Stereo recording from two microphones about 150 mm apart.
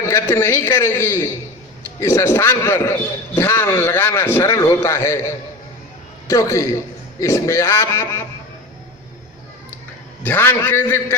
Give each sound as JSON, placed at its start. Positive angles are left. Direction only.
{"t": 0.1, "sound": "a man's voice", "side_deg": 15}
{"t": 10.2, "sound": "a man's voice", "side_deg": 15}